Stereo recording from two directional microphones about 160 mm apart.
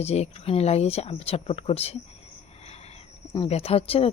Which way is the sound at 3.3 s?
35° left (ahead or behind).